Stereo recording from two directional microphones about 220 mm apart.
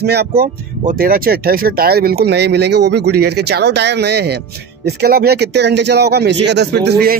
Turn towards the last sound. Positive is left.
turn(degrees=-45)  # may be behind; listen again after turning